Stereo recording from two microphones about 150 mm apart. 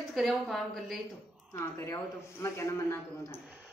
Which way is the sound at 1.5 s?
15° left (ahead or behind).